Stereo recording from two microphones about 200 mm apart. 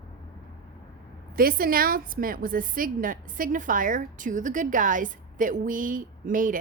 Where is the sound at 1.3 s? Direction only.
45° right (ahead or behind).